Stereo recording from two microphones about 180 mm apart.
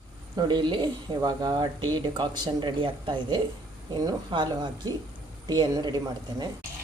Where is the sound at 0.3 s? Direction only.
25° right (ahead or behind).